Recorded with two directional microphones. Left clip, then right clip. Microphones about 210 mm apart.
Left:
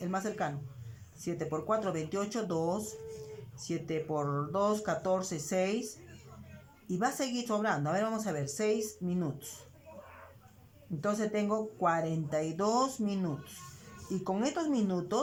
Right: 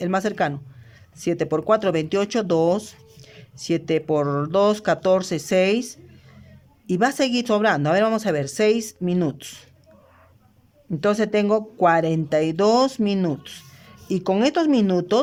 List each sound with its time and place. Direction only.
0.0 s speech: 50° right (ahead or behind)
11.0 s speech: 50° right (ahead or behind)